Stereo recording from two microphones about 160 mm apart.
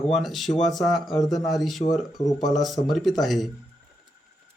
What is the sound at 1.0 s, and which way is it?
Speech, 25° left (ahead or behind).